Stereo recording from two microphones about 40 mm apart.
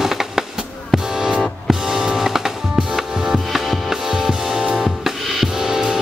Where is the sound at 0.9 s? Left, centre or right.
Centre.